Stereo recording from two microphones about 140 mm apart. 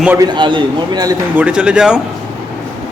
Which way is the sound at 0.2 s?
35° right (ahead or behind).